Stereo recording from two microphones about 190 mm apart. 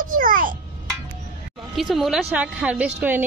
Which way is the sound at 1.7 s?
Centre (ahead or behind).